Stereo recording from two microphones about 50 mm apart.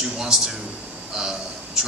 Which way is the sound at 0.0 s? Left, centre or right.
Centre.